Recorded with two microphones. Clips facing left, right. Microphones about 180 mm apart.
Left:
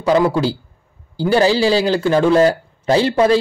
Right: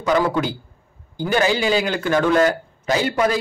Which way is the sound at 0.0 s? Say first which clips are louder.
Left 4 dB; 25° left (ahead or behind).